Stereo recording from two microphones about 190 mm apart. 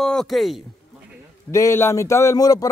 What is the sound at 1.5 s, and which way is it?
Speech, 15° left (ahead or behind).